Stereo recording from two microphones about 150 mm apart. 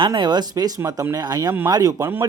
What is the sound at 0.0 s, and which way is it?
Speech, 30° right (ahead or behind).